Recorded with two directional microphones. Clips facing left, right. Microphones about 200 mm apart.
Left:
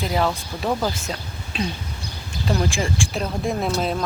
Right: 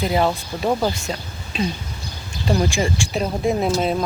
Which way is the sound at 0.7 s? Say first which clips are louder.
Right 3 dB; 15° right (ahead or behind).